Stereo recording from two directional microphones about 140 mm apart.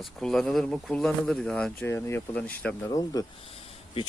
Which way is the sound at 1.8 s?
20° left (ahead or behind).